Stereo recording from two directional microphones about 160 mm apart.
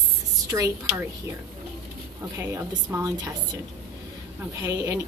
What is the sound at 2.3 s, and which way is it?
Speech, 15° right (ahead or behind).